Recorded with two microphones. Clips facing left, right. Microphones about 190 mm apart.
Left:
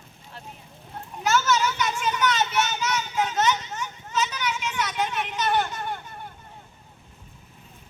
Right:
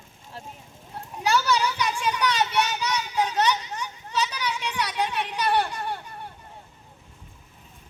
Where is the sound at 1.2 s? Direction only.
35° right (ahead or behind).